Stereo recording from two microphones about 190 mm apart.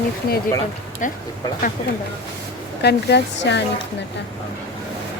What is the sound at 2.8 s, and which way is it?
Speech, 60° left (ahead or behind).